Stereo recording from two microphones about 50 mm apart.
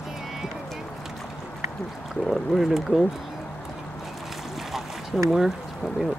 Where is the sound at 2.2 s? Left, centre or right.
Centre.